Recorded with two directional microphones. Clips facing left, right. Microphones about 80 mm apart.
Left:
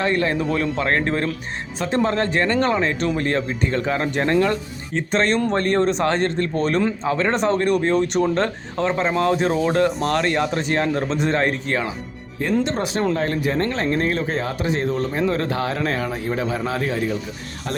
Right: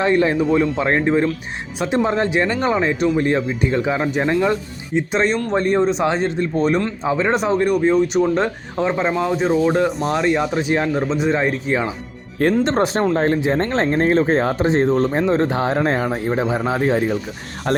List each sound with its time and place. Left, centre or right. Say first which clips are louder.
0.0 s a man's voice: right 4 dB; centre
12.6 s speech: right 4 dB; right
17.7 s speech: right 8 dB; right